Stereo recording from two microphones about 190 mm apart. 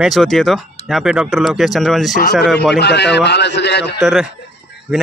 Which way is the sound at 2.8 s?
65° left (ahead or behind).